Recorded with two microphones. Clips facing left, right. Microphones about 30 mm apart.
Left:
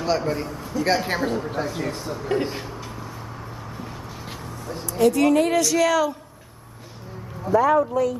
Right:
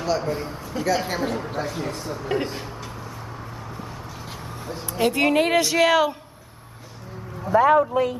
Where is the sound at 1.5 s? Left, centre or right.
Centre.